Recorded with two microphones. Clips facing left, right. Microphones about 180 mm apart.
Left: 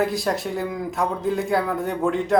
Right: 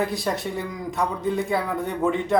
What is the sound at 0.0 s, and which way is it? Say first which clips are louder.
A man's voice: left 2 dB; centre (ahead or behind).